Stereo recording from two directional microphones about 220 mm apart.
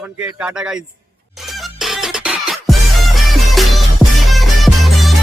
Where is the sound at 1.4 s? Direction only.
Centre (ahead or behind).